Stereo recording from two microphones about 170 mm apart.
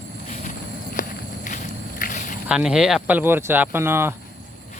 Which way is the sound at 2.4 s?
5° right (ahead or behind).